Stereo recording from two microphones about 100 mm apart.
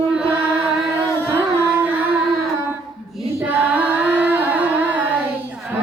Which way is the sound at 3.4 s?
15° right (ahead or behind).